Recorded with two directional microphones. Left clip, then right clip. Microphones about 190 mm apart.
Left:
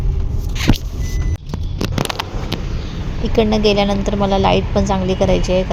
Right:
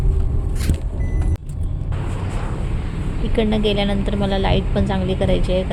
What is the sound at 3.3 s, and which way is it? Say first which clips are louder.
A woman's voice: left 5 dB; 15° left (ahead or behind).